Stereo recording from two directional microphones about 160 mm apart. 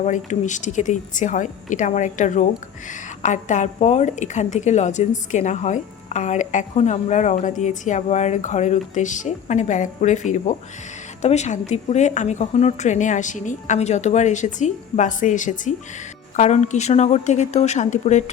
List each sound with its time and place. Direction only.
0.0 s a woman's voice: 50° left (ahead or behind)